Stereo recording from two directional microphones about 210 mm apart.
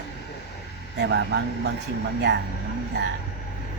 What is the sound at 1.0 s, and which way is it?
Speech, 55° right (ahead or behind).